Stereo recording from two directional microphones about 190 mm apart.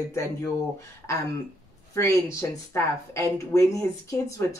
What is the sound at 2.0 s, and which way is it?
Speech, 15° left (ahead or behind).